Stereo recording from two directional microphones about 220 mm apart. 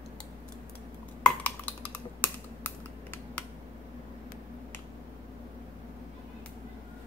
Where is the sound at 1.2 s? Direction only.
5° left (ahead or behind).